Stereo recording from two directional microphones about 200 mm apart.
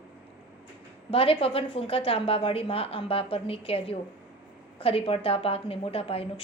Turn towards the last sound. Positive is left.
turn(degrees=30)  # may be behind; listen again after turning